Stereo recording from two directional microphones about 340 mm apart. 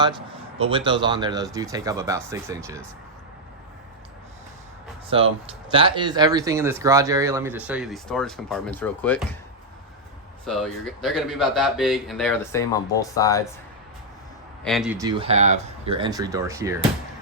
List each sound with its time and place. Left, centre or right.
0.6 s speech: centre
5.0 s speech: centre
10.4 s speech: centre
14.6 s speech: centre